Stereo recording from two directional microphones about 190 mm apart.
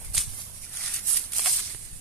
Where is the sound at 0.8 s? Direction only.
Centre (ahead or behind).